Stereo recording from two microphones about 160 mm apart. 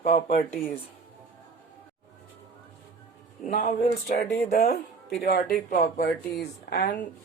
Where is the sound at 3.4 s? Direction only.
55° left (ahead or behind); by 5.6 s 80° left.